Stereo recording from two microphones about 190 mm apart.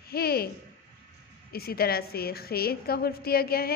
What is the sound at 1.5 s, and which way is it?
A woman's voice, 55° left (ahead or behind).